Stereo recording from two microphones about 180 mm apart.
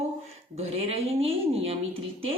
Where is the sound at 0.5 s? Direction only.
35° right (ahead or behind).